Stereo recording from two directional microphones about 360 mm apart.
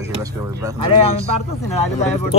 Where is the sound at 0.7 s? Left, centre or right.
Centre.